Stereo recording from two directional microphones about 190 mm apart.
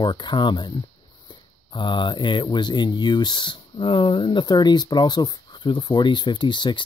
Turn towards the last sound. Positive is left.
turn(degrees=25)  # may be behind; listen again after turning